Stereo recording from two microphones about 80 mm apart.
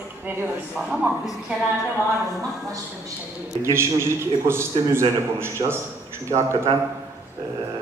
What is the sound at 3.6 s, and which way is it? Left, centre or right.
A man's voice, right.